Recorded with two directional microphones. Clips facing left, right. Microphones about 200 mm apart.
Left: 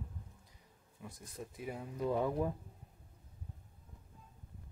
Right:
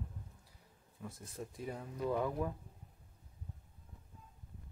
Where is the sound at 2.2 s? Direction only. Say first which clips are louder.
Left 2 dB; 25° left (ahead or behind).